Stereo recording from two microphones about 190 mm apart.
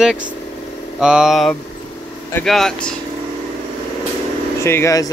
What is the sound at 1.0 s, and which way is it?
Speech, 5° right (ahead or behind).